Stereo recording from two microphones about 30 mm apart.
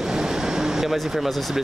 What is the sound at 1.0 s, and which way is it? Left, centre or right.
Speech, centre.